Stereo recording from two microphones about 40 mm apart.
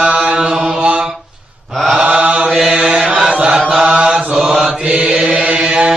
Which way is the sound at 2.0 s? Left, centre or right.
Right.